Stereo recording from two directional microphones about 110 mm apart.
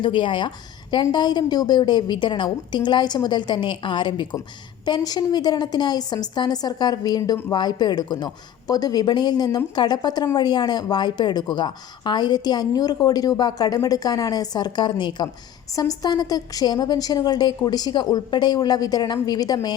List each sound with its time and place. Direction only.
0.0 s a woman's voice: 50° left (ahead or behind)